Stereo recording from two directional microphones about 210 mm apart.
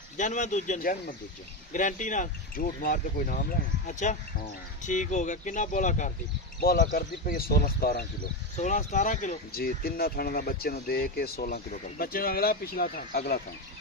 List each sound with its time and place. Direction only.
0.2 s speech: 35° left (ahead or behind)
8.5 s speech: 35° left (ahead or behind)